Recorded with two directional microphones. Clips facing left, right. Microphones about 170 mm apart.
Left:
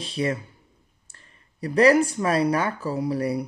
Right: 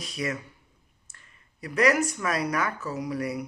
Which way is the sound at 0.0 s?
30° left (ahead or behind).